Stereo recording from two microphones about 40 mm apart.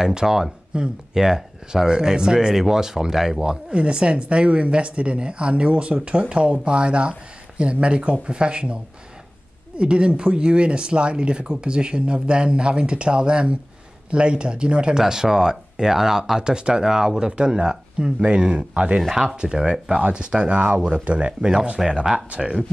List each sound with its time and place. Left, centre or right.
0.0 s speech: centre
3.7 s speech: right
9.8 s speech: right
18.9 s speech: centre
19.4 s speech: right
22.3 s speech: right